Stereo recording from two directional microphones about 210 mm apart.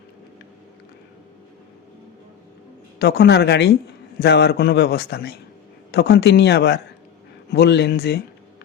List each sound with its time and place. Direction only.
3.0 s a man's voice: 50° left (ahead or behind)